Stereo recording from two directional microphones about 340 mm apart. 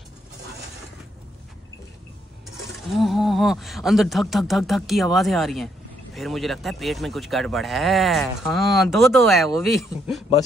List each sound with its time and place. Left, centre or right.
2.8 s speech: centre